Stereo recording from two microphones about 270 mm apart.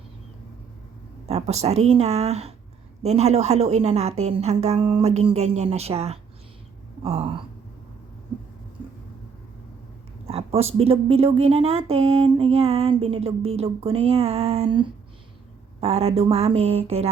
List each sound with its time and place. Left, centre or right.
1.3 s speech: right
10.2 s speech: right